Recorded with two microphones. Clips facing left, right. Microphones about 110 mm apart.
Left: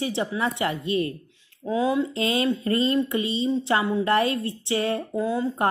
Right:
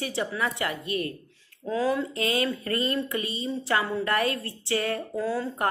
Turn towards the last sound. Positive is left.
turn(degrees=20)  # may be behind; listen again after turning